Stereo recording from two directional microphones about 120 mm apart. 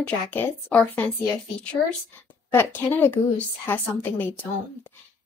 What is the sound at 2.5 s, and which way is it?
Speech, 20° left (ahead or behind).